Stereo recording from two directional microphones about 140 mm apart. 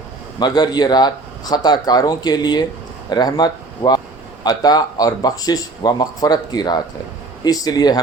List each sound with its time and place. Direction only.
0.3 s speech: 30° left (ahead or behind)